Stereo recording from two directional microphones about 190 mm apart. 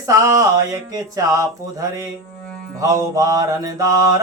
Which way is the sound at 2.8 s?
15° right (ahead or behind).